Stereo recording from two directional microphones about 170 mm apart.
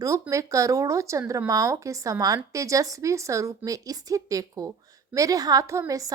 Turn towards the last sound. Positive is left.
turn(degrees=-20)  # may be behind; listen again after turning